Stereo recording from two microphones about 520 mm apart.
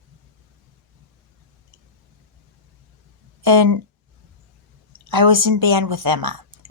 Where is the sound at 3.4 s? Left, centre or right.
Right.